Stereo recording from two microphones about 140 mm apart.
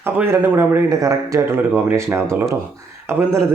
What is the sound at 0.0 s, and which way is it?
Speech, 15° right (ahead or behind).